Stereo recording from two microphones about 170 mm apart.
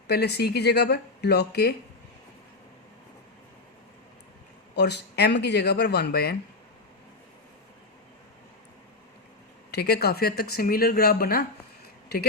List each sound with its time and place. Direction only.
0.1 s speech: 75° left (ahead or behind)
4.7 s speech: 80° left
9.7 s speech: 70° left (ahead or behind)